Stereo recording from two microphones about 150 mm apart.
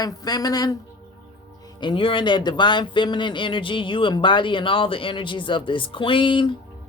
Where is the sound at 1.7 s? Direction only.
35° left (ahead or behind).